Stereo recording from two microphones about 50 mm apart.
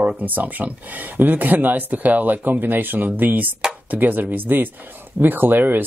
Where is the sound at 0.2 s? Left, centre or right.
Right.